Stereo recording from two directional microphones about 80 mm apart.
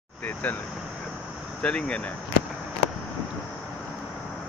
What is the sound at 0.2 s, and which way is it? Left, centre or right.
Vehicle, left.